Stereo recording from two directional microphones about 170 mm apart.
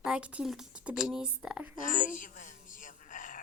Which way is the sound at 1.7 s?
50° left (ahead or behind).